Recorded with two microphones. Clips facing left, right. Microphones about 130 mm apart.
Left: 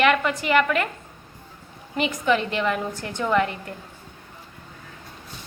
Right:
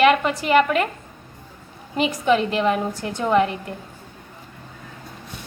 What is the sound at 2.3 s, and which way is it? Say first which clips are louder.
A woman's voice: right 5 dB; 30° right (ahead or behind).